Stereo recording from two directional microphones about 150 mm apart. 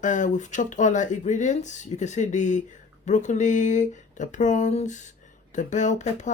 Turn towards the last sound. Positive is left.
turn(degrees=55)  # may be behind; listen again after turning